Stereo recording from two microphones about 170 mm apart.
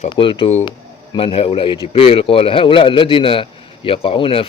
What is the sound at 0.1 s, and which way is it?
A man's voice, 30° left (ahead or behind).